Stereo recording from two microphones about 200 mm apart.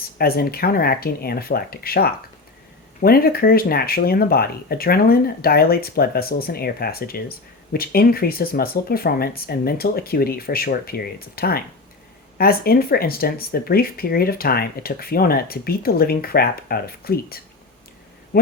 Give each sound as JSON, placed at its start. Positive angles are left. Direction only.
{"t": 0.2, "sound": "speech", "side_deg": 50}